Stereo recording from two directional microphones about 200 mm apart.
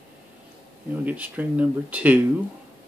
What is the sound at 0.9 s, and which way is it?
Speech, 10° right (ahead or behind).